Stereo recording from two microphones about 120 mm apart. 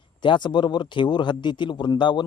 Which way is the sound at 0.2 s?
40° left (ahead or behind).